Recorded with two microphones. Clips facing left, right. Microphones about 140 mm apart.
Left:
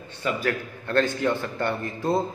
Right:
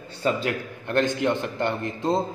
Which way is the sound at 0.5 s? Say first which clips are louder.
Left 1 dB; 20° right (ahead or behind).